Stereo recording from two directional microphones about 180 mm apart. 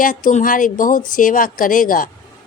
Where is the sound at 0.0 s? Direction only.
50° left (ahead or behind).